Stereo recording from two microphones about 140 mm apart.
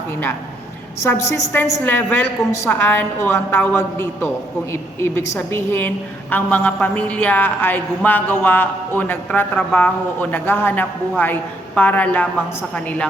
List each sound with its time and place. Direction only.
1.0 s a woman's voice: 20° left (ahead or behind)